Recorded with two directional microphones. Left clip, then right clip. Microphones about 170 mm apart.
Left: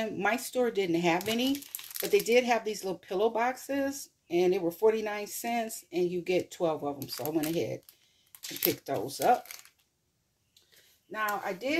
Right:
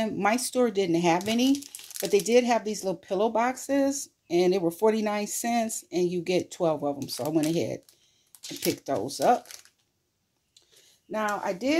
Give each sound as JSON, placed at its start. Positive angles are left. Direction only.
{"t": 0.0, "sound": "speech", "side_deg": -35}
{"t": 8.8, "sound": "speech", "side_deg": -35}
{"t": 11.1, "sound": "speech", "side_deg": -60}